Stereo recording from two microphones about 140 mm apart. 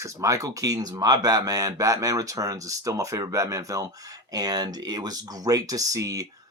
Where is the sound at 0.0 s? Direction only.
20° right (ahead or behind).